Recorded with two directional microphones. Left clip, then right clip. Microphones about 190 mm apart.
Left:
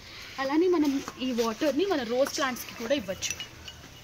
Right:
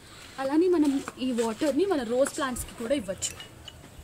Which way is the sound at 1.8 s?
30° right (ahead or behind).